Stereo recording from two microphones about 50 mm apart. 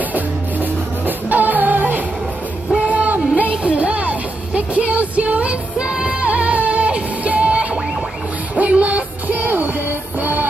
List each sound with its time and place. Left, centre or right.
0.1 s music: right